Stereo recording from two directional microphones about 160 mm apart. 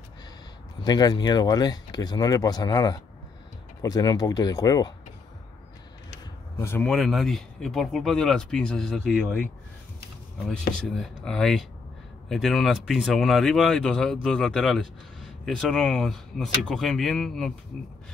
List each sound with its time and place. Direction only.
0.8 s speech: 25° left (ahead or behind)
6.6 s speech: 15° left (ahead or behind)
6.9 s speech: centre (ahead or behind)
10.8 s speech: 5° left (ahead or behind)